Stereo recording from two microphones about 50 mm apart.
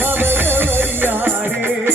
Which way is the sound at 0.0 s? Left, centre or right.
Right.